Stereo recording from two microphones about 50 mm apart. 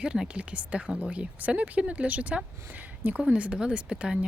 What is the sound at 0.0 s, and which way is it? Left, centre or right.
Speech, centre.